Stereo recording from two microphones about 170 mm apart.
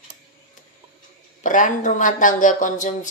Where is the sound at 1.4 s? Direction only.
50° left (ahead or behind).